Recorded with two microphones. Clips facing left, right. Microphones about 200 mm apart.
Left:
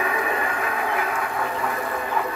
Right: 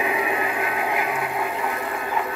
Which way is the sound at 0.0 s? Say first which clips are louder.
Right 1 dB; 10° right (ahead or behind).